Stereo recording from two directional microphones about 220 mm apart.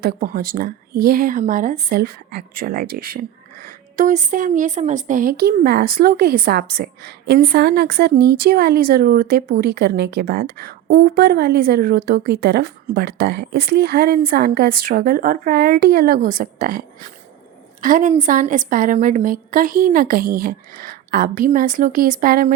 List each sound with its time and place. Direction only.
0.0 s a woman's voice: 40° right (ahead or behind)